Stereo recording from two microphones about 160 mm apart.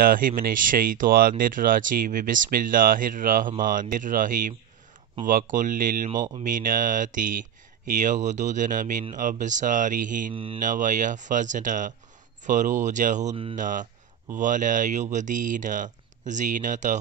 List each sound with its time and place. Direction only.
0.0 s speech: 60° right (ahead or behind)
10.3 s mantra: 35° right (ahead or behind)
10.6 s speech: 55° right (ahead or behind)